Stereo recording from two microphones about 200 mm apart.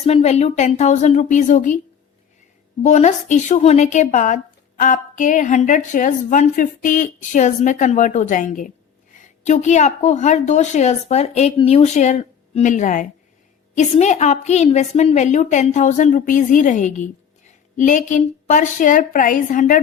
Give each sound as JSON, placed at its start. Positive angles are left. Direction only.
{"t": 0.0, "sound": "a woman's voice", "side_deg": 30}
{"t": 2.8, "sound": "a woman's voice", "side_deg": 35}